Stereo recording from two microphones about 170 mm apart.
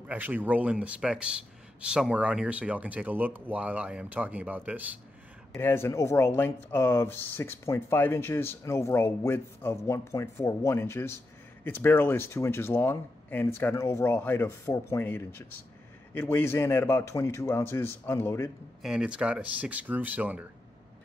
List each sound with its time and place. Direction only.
0.1 s speech: 10° right (ahead or behind)
5.6 s speech: 15° left (ahead or behind)
18.8 s speech: 5° right (ahead or behind)